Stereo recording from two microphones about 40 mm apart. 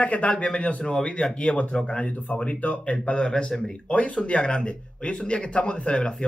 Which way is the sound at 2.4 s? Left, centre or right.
Left.